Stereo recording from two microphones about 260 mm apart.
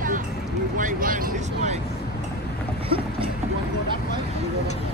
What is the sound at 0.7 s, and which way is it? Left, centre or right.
Vehicle, right.